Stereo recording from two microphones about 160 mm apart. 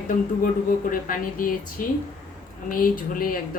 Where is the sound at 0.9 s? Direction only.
60° left (ahead or behind).